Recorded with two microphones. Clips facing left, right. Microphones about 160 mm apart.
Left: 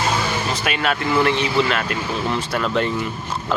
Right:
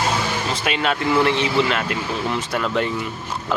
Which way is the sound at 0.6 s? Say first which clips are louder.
Right 2 dB; 25° right (ahead or behind).